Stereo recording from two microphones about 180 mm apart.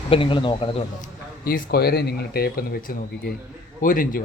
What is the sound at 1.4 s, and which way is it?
Speech, 55° left (ahead or behind).